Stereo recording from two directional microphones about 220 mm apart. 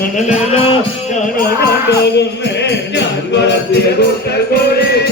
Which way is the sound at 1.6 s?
50° left (ahead or behind).